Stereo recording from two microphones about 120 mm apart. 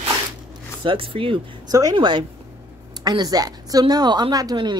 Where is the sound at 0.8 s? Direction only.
50° right (ahead or behind).